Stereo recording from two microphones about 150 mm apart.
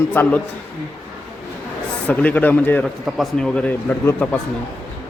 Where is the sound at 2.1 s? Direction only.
10° left (ahead or behind).